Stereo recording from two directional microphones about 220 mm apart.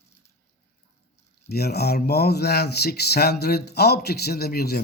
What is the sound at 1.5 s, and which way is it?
Speech, 45° left (ahead or behind).